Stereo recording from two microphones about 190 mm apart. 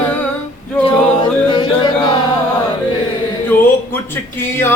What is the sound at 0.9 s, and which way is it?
Music, 25° left (ahead or behind).